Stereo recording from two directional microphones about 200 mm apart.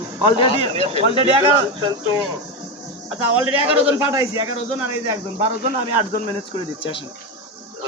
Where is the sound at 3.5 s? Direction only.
25° left (ahead or behind).